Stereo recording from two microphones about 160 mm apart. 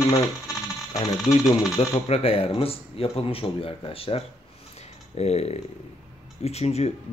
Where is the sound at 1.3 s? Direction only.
45° left (ahead or behind).